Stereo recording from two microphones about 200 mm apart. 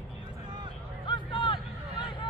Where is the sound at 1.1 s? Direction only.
25° left (ahead or behind).